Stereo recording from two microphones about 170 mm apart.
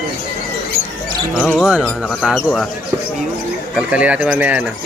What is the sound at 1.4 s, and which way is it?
Speech, 5° left (ahead or behind).